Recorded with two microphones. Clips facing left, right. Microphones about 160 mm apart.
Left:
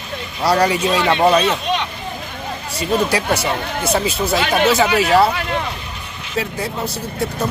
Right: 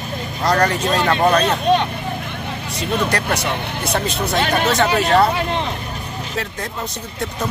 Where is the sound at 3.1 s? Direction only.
5° left (ahead or behind).